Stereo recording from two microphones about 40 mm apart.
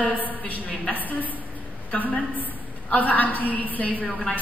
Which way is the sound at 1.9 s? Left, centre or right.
Left.